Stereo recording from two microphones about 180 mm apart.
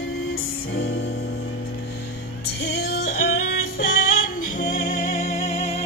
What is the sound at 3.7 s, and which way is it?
Music, 55° left (ahead or behind).